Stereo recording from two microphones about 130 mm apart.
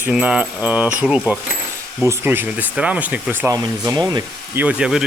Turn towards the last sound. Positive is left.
turn(degrees=-5)  # may be behind; listen again after turning